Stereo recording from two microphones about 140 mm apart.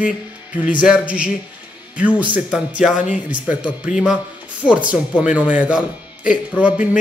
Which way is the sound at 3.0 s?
65° left (ahead or behind).